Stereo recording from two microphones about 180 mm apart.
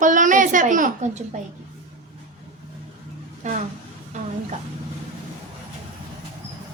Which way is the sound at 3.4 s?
40° right (ahead or behind).